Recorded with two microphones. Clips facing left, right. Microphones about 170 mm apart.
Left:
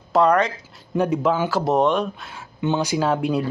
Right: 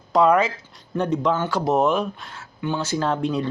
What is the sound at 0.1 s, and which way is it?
Speech, centre (ahead or behind).